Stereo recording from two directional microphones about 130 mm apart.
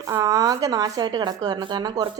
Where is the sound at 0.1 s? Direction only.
25° right (ahead or behind).